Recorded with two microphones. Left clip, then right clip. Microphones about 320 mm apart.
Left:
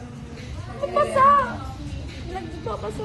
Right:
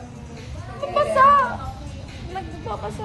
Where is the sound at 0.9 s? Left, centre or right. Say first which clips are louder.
Right 2 dB; centre.